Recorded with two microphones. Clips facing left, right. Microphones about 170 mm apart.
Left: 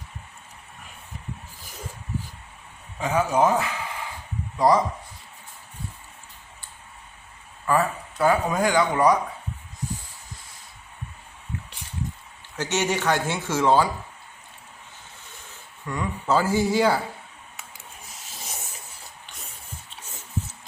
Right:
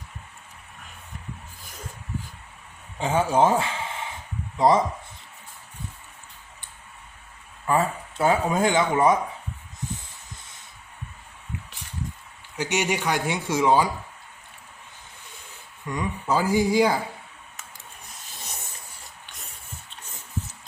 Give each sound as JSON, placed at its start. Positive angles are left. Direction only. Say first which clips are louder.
{"t": 3.0, "sound": "speech", "louder": "right 1 dB", "side_deg": -30}
{"t": 7.7, "sound": "speech", "louder": "even", "side_deg": -25}
{"t": 12.5, "sound": "speech", "louder": "even", "side_deg": -10}
{"t": 15.9, "sound": "speech", "louder": "left 1 dB", "side_deg": -15}
{"t": 19.2, "sound": "a sound", "louder": "left 1 dB", "side_deg": 0}